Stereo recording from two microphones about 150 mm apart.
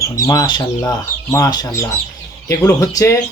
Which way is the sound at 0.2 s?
25° left (ahead or behind).